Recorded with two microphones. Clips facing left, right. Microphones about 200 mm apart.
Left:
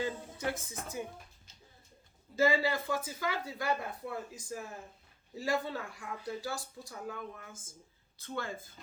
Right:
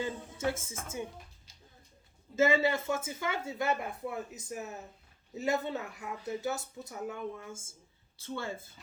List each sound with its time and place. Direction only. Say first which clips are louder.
0.0 s speech: right 2 dB; 25° right (ahead or behind)
2.3 s speech: right 2 dB; 25° right (ahead or behind)